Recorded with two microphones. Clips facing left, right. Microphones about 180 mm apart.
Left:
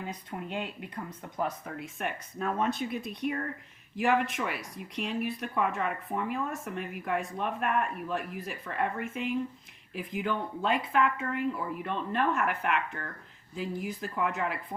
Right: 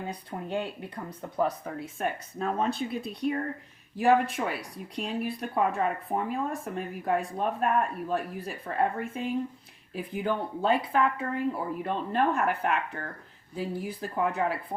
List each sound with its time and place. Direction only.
0.1 s speech: 35° right (ahead or behind)